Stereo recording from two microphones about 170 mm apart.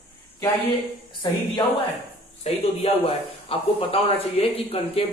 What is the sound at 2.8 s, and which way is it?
Speech, 35° left (ahead or behind).